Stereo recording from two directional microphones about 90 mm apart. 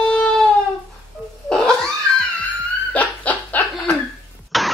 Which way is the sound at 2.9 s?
15° left (ahead or behind).